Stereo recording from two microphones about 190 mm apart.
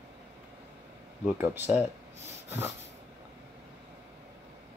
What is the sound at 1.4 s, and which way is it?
Speech, 10° right (ahead or behind).